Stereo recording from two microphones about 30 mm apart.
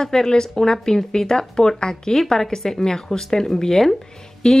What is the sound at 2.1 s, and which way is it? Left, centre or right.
A woman's voice, centre.